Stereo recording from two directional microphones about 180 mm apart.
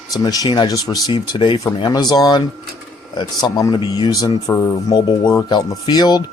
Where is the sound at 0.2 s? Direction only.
20° left (ahead or behind).